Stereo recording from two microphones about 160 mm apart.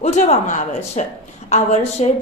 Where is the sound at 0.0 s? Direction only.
45° left (ahead or behind).